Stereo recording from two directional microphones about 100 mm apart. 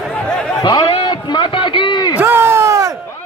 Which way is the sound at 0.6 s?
50° left (ahead or behind).